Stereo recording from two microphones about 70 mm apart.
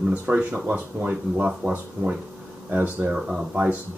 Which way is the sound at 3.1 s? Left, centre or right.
Centre.